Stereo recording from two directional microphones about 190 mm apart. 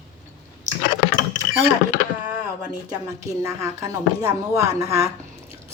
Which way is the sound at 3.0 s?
15° right (ahead or behind).